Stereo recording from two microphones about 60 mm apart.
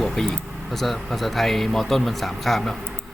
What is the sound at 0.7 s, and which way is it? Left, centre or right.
Speech, centre.